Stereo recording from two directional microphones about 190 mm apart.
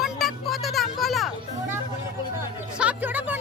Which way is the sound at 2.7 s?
10° right (ahead or behind).